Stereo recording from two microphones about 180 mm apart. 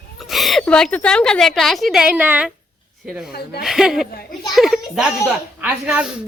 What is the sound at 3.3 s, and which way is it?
Speech, 60° left (ahead or behind).